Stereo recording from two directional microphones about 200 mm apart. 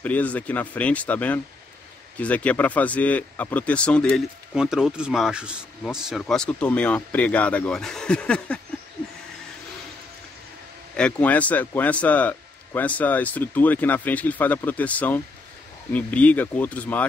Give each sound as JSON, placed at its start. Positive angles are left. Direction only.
{"t": 0.0, "sound": "a man's voice", "side_deg": 5}
{"t": 11.0, "sound": "a man's voice", "side_deg": 5}